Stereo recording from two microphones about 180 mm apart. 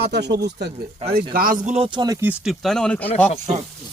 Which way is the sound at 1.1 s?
55° right (ahead or behind).